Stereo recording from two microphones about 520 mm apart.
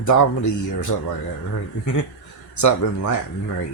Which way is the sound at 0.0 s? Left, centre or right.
Left.